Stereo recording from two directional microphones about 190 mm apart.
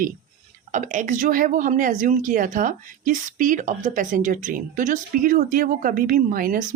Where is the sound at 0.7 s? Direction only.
40° right (ahead or behind).